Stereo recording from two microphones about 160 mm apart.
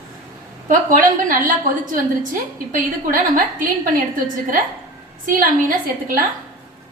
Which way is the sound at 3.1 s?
55° right (ahead or behind).